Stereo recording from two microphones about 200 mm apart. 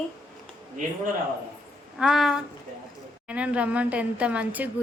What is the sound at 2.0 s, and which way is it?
A woman's voice, centre (ahead or behind).